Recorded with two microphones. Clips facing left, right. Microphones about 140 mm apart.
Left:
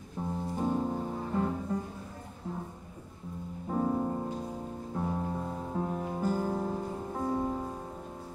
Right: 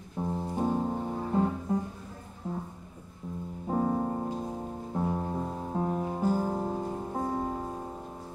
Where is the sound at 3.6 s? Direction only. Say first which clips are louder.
Right 2 dB; 25° right (ahead or behind).